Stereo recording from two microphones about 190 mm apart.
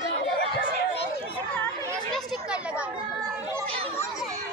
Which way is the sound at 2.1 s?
5° right (ahead or behind).